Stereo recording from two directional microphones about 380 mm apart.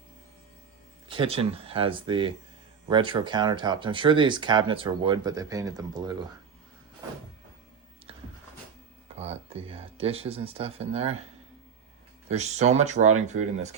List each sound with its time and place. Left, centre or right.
1.0 s speech: centre
9.1 s speech: centre
12.3 s speech: centre